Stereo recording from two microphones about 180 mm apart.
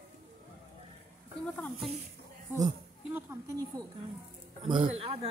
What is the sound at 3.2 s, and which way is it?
Speech, 15° right (ahead or behind).